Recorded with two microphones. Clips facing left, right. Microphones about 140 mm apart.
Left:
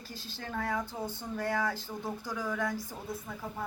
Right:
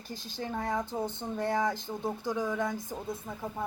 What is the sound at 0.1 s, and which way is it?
Speech, 15° right (ahead or behind).